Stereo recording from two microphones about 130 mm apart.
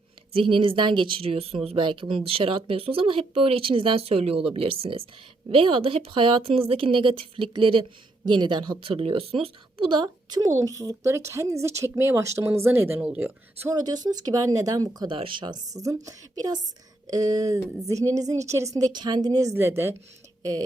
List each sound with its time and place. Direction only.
0.3 s a woman's voice: 40° right (ahead or behind); by 13.7 s 15° right (ahead or behind)
13.7 s speech: 30° right (ahead or behind)